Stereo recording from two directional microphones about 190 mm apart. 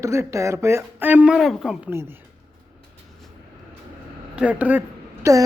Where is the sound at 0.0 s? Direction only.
15° right (ahead or behind).